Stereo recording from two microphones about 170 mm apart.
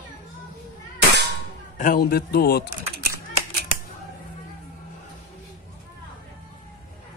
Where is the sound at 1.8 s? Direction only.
55° left (ahead or behind).